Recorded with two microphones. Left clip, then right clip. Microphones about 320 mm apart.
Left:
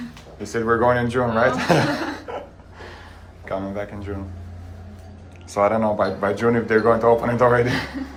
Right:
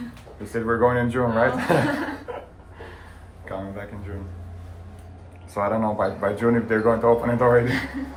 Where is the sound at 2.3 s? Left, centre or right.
Centre.